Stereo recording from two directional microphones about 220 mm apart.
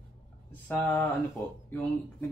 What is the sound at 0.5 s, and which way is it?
Speech, 10° left (ahead or behind).